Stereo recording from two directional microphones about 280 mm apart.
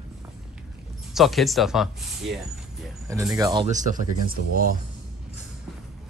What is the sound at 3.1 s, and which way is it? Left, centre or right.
Speech, centre.